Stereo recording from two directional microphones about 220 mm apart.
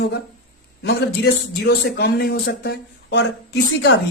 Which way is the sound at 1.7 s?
45° left (ahead or behind).